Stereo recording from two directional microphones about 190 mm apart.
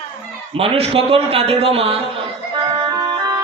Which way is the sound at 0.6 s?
30° right (ahead or behind).